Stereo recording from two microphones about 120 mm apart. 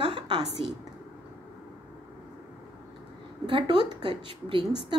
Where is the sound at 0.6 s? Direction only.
50° right (ahead or behind).